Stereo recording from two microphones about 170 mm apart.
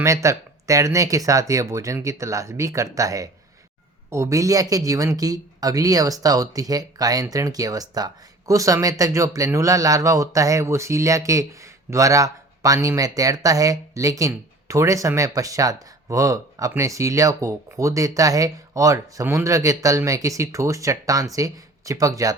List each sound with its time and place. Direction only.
0.0 s speech: 15° right (ahead or behind)